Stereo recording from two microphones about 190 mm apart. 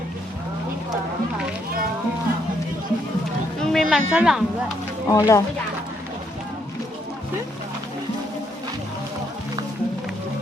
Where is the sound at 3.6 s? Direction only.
Centre (ahead or behind).